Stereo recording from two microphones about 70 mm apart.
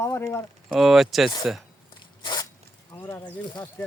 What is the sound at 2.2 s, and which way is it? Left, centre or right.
Zipper, left.